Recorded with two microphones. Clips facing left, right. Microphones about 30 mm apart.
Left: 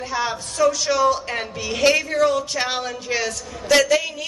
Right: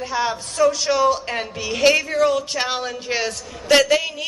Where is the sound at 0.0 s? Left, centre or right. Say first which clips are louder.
Right 2 dB; centre.